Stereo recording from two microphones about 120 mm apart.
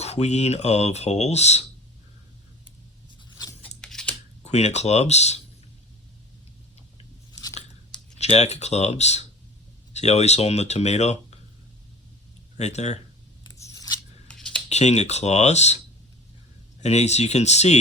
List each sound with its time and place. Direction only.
0.0 s speech: 65° left (ahead or behind)
3.8 s scissors: 5° left (ahead or behind)
4.4 s speech: 70° left (ahead or behind)
8.2 s speech: 65° left (ahead or behind)
12.5 s speech: 70° left (ahead or behind)
13.5 s scissors: 25° left (ahead or behind)
14.3 s a sound: 10° left (ahead or behind)
14.7 s speech: 70° left (ahead or behind)
16.8 s speech: 65° left (ahead or behind)